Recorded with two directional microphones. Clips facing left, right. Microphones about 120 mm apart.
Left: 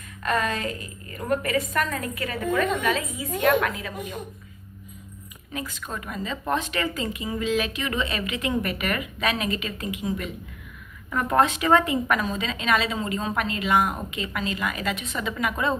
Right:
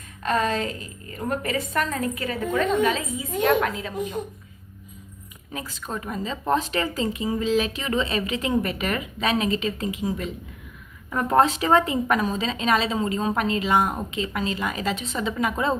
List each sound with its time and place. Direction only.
0.2 s a woman's voice: 30° right (ahead or behind)
5.7 s a woman's voice: 30° right (ahead or behind)